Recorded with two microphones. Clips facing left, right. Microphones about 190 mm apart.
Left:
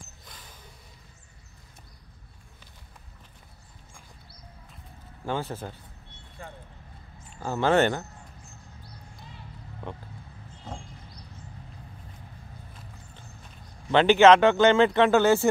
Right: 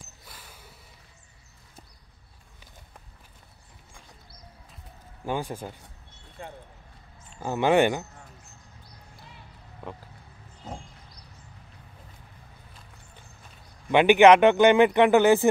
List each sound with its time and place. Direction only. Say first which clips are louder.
0.2 s a sound: even; 10° right (ahead or behind)
5.2 s speech: right 1 dB; 15° right (ahead or behind)
7.4 s speech: right 1 dB; 15° right (ahead or behind)
13.9 s speech: right 1 dB; 15° right (ahead or behind)